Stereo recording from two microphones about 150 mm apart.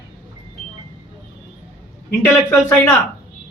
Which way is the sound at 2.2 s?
20° left (ahead or behind).